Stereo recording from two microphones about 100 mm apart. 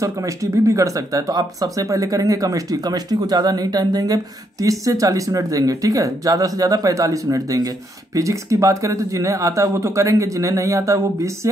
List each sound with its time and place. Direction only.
0.0 s speech: 35° right (ahead or behind)